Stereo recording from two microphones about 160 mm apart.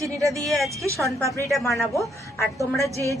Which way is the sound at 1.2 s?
20° right (ahead or behind).